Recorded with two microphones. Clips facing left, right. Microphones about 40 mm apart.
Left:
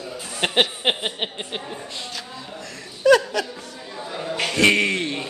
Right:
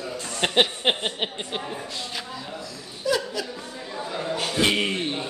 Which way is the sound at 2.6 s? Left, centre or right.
Left.